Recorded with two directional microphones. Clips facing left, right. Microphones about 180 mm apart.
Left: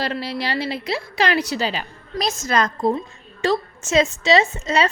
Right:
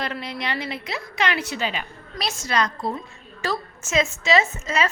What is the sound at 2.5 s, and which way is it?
Speech, 50° left (ahead or behind).